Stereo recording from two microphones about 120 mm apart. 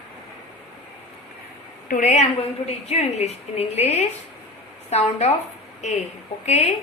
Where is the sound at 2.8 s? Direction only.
65° left (ahead or behind).